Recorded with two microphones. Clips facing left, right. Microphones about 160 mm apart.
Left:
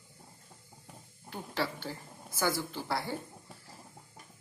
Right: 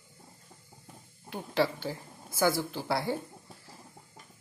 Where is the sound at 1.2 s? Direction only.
15° right (ahead or behind).